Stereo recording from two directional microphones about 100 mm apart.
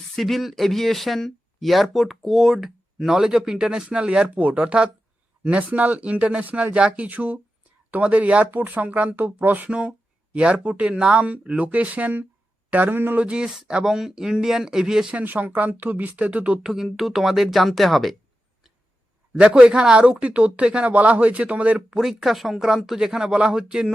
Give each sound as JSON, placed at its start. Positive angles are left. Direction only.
{"t": 0.2, "sound": "speech", "side_deg": 0}
{"t": 15.2, "sound": "speech", "side_deg": -15}
{"t": 19.3, "sound": "speech", "side_deg": -10}